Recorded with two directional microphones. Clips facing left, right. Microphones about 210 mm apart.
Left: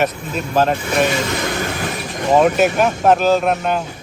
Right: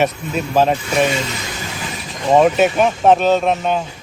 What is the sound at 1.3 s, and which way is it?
Vehicle, 55° left (ahead or behind).